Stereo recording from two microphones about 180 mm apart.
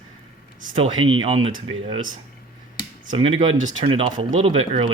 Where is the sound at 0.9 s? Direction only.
90° right.